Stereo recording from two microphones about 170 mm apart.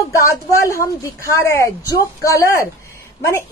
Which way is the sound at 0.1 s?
20° left (ahead or behind).